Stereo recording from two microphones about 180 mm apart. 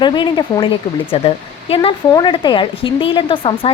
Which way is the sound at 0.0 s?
25° left (ahead or behind).